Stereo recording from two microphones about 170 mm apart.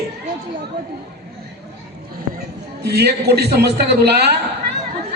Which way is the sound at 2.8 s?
70° right (ahead or behind).